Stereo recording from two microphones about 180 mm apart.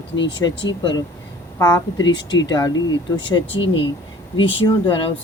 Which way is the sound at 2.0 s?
85° left.